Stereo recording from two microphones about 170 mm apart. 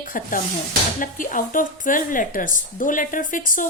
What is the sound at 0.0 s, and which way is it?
A woman's voice, 50° left (ahead or behind).